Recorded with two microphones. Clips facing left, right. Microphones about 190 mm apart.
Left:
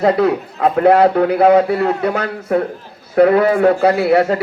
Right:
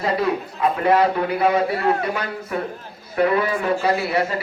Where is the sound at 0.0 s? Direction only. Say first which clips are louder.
Left 7 dB; 70° left (ahead or behind).